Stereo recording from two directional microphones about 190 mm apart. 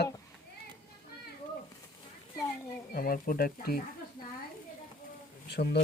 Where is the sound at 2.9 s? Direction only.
50° left (ahead or behind).